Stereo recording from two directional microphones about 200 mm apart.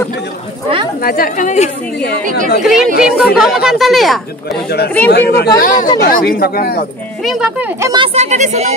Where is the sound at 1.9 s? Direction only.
55° left (ahead or behind).